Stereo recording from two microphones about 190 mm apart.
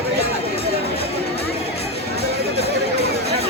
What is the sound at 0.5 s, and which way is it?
Music, 30° left (ahead or behind).